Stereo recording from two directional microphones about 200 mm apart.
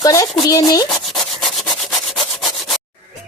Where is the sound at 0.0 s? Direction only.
15° left (ahead or behind).